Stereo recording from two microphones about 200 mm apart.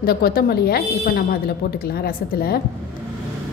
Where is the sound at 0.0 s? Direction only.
50° left (ahead or behind).